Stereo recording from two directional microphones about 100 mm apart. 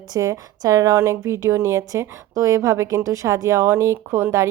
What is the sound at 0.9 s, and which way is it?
A woman's voice, 25° right (ahead or behind).